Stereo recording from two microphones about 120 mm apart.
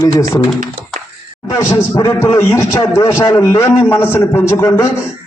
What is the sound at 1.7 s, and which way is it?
A man's voice, 25° left (ahead or behind).